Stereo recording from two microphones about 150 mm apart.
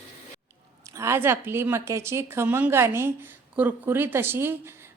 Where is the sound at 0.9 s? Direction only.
20° right (ahead or behind).